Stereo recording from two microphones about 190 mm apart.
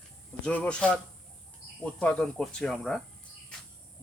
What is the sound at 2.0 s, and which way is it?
Speech, 5° left (ahead or behind).